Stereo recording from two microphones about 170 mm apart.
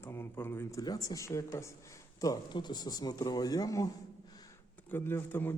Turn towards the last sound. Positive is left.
turn(degrees=15)  # may be behind; listen again after turning